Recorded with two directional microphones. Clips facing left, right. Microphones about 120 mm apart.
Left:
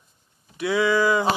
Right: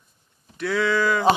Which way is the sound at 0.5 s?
10° left (ahead or behind).